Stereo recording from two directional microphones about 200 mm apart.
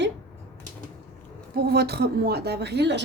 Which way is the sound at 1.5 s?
50° right (ahead or behind).